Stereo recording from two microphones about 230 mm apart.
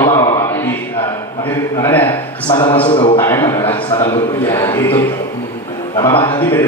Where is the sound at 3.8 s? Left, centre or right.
Left.